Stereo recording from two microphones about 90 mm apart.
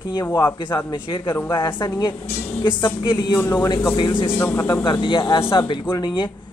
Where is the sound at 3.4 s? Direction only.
25° left (ahead or behind).